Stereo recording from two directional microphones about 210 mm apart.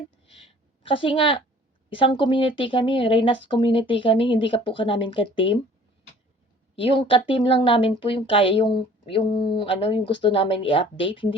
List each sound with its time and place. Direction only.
0.3 s a sound: 25° left (ahead or behind)
1.9 s speech: 25° left (ahead or behind)
6.7 s speech: 25° left (ahead or behind)
9.3 s speech: 50° left (ahead or behind)
9.6 s speech: 25° left (ahead or behind)